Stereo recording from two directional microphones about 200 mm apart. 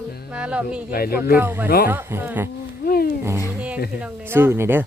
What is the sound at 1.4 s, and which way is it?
Speech, 10° right (ahead or behind).